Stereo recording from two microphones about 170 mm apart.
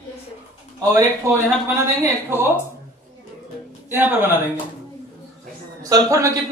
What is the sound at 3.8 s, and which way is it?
Speech, 10° right (ahead or behind).